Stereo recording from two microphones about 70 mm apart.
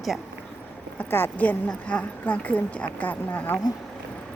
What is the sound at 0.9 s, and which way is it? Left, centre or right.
Speech, left.